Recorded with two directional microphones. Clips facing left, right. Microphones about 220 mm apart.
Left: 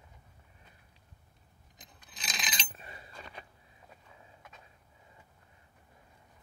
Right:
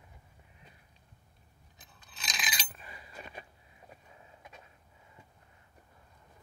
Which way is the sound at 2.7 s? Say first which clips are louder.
Left 1 dB; 25° left (ahead or behind).